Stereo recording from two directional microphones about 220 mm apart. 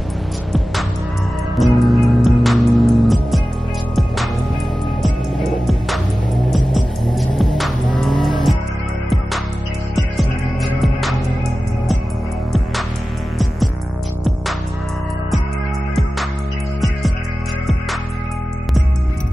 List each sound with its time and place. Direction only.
1.6 s music: centre (ahead or behind)
5.0 s music: centre (ahead or behind)
8.0 s vehicle: centre (ahead or behind)
9.9 s music: centre (ahead or behind)
15.9 s music: centre (ahead or behind)